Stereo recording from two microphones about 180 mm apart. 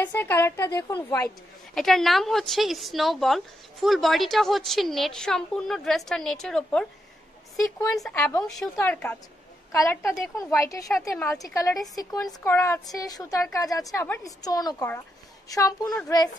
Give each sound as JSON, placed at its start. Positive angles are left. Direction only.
{"t": 0.0, "sound": "a woman's voice", "side_deg": 10}
{"t": 1.8, "sound": "a woman's voice", "side_deg": 0}
{"t": 10.9, "sound": "a woman's voice", "side_deg": 0}
{"t": 11.2, "sound": "speech", "side_deg": 20}